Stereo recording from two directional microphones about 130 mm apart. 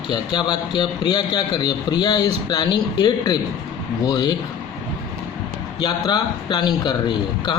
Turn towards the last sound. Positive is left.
turn(degrees=35)  # may be behind; listen again after turning